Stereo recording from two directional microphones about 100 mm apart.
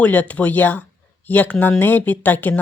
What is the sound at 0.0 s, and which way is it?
Speech, 15° left (ahead or behind).